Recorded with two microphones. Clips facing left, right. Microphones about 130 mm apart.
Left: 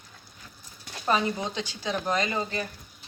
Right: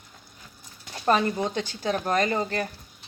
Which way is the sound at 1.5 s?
50° right (ahead or behind).